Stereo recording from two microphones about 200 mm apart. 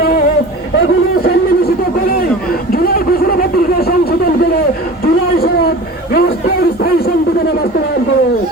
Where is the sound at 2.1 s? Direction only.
50° left (ahead or behind).